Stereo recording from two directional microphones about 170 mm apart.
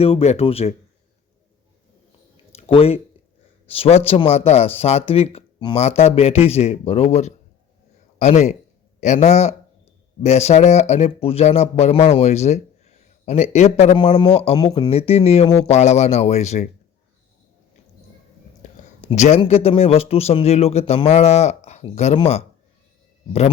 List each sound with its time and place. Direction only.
0.0 s speech: 35° left (ahead or behind)
2.5 s a sound: 35° left (ahead or behind)
3.7 s speech: 35° left (ahead or behind)
13.9 s a man's voice: 25° left (ahead or behind)
14.8 s speech: 35° left (ahead or behind)
19.0 s speech: 40° left (ahead or behind)